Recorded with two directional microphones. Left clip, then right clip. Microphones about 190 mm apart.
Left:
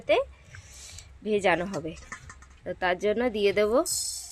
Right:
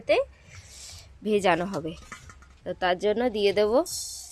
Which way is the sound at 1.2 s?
20° right (ahead or behind).